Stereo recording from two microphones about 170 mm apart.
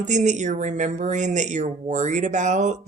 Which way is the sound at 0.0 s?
45° right (ahead or behind).